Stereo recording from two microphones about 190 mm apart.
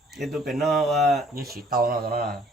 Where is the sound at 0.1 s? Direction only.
Centre (ahead or behind).